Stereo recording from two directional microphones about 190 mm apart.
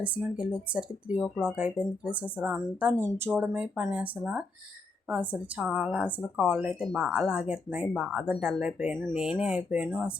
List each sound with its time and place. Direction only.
0.0 s a woman's voice: 5° right (ahead or behind)